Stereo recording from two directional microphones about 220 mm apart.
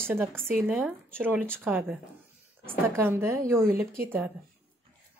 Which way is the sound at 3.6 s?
40° right (ahead or behind).